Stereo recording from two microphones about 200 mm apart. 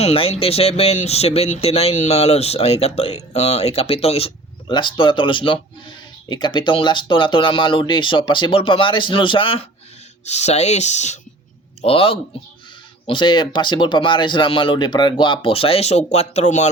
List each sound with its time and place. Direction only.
0.0 s speech: 30° left (ahead or behind)